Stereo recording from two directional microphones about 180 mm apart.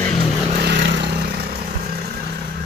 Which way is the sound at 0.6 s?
75° right (ahead or behind).